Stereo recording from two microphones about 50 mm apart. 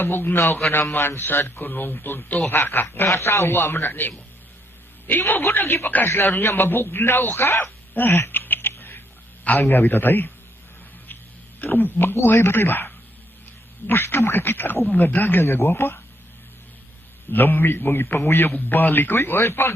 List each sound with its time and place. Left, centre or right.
0.0 s a man's voice: left
3.0 s a man's voice: left
3.5 s a man's voice: left
5.3 s a man's voice: left
11.6 s a man's voice: left
12.1 s a man's voice: left
17.3 s a man's voice: left